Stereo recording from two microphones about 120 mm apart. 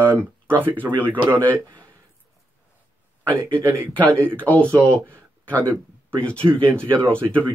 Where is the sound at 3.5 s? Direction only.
15° right (ahead or behind).